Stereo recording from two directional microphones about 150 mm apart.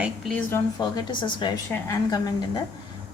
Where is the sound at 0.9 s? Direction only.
30° left (ahead or behind).